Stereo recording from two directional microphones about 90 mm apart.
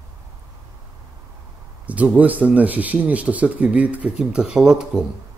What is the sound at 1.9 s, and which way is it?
Speech, 15° right (ahead or behind).